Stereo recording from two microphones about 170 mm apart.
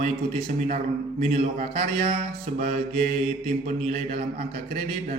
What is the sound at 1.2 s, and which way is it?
Speech, 40° right (ahead or behind).